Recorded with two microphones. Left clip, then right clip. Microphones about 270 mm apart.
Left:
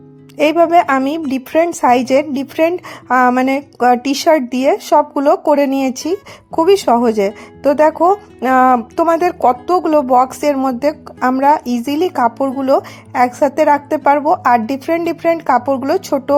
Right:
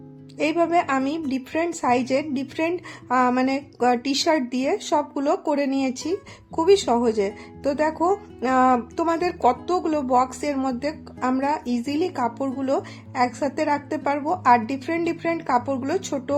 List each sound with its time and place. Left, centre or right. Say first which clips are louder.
0.3 s speech: left 10 dB; left